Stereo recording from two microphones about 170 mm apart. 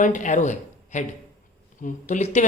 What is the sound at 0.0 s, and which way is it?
Speech, 50° left (ahead or behind).